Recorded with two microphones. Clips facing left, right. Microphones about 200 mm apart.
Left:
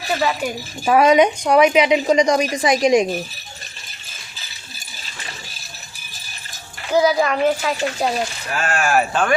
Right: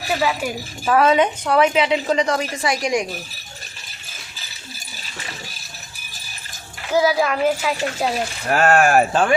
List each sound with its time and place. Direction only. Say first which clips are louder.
0.1 s a child's voice: left 1 dB; 5° right (ahead or behind)
0.9 s a woman's voice: left 3 dB; 15° left (ahead or behind)
6.9 s a child's voice: left 1 dB; centre (ahead or behind)
8.4 s speech: right 8 dB; 60° right (ahead or behind)